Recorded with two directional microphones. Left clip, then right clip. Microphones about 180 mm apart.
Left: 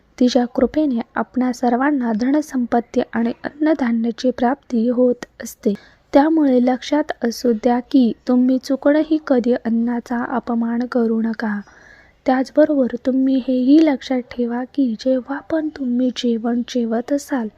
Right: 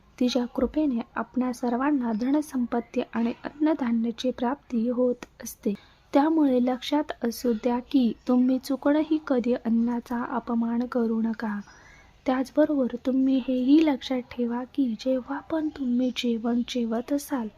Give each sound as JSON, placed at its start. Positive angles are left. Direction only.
{"t": 0.2, "sound": "speech", "side_deg": 30}